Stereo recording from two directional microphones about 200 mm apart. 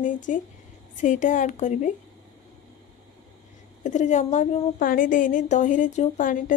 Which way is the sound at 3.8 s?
35° left (ahead or behind).